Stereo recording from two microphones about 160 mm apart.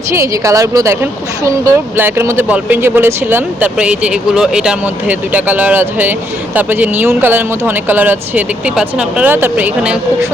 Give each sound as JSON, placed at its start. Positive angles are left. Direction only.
{"t": 0.1, "sound": "a woman's voice", "side_deg": -20}